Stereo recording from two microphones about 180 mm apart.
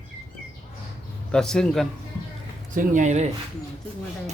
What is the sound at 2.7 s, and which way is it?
Speech, 45° right (ahead or behind).